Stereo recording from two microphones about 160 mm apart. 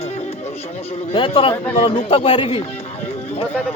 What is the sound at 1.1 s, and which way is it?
Speech, 30° left (ahead or behind).